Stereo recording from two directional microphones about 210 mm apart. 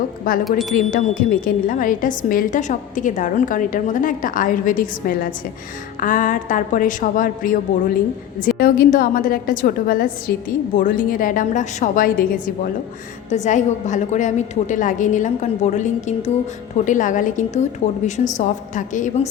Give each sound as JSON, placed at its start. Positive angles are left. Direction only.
{"t": 0.3, "sound": "a woman's voice", "side_deg": 40}
{"t": 13.3, "sound": "a woman's voice", "side_deg": 35}